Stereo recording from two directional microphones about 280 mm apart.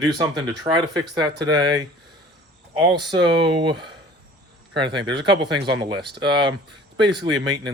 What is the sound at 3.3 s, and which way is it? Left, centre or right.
Speech, centre.